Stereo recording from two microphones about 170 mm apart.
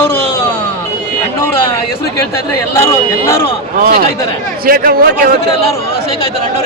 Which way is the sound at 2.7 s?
15° left (ahead or behind).